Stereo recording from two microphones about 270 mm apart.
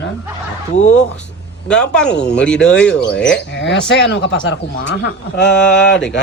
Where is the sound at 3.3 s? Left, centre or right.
Left.